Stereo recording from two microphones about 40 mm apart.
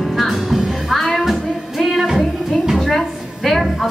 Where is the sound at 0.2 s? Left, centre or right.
Centre.